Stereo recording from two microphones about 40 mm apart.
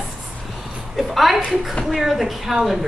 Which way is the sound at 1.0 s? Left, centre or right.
Centre.